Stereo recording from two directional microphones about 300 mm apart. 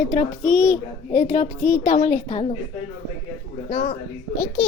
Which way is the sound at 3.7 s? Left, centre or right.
Left.